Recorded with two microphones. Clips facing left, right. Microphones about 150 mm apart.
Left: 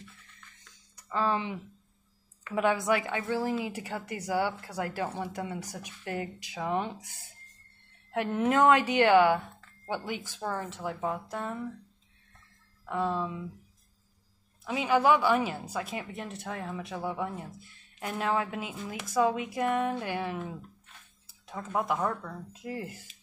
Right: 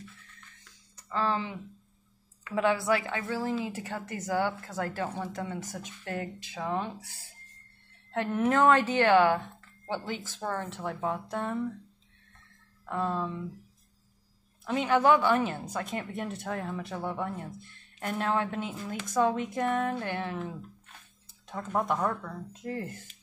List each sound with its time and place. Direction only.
0.9 s a woman's voice: 15° left (ahead or behind)
12.8 s a woman's voice: 5° left (ahead or behind)
14.6 s a woman's voice: 5° left (ahead or behind)